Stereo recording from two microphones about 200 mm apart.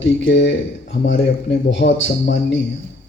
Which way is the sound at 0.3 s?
60° left (ahead or behind).